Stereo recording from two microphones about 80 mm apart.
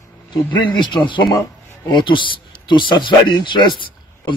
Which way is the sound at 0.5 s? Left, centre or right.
Left.